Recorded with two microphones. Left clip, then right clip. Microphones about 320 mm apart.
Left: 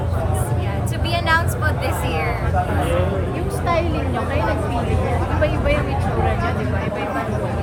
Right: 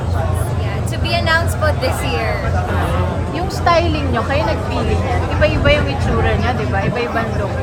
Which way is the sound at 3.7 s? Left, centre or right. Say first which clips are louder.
Right 7 dB; right.